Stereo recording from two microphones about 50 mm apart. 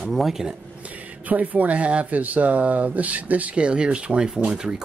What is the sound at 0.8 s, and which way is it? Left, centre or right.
Speech, right.